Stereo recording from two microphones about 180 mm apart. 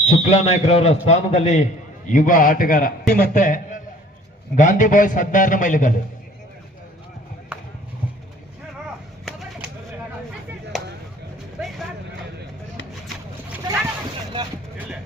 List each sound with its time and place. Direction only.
0.0 s a man's voice: 40° left (ahead or behind)
9.2 s a sound: centre (ahead or behind)
10.7 s chop: centre (ahead or behind)